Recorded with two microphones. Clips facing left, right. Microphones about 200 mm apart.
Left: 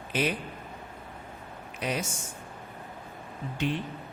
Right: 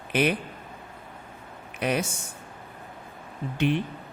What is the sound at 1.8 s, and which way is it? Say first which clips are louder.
Speech: right 5 dB; 65° right (ahead or behind).